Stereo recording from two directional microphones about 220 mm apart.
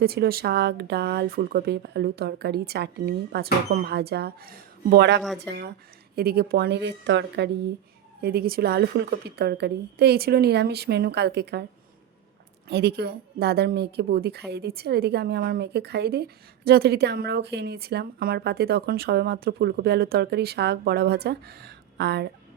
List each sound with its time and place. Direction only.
0.0 s speech: 45° right (ahead or behind)
12.6 s speech: 50° right (ahead or behind)